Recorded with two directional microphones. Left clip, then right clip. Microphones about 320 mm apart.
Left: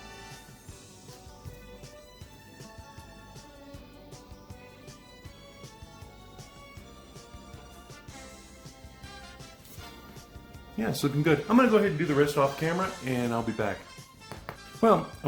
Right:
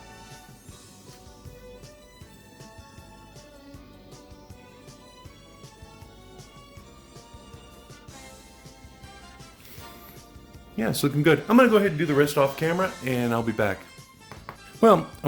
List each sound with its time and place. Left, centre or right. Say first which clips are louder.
10.8 s speech: right 4 dB; right
14.8 s speech: right 5 dB; right